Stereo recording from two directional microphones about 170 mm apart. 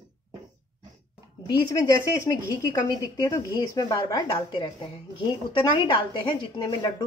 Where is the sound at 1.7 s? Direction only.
20° left (ahead or behind).